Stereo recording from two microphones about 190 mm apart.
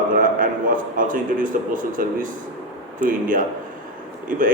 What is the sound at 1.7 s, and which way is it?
A man's voice, 45° right (ahead or behind).